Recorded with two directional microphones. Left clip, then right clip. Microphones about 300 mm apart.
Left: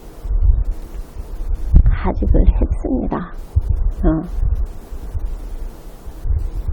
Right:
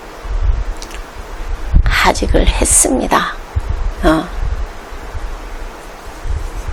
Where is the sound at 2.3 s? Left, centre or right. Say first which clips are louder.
Right 9 dB; centre.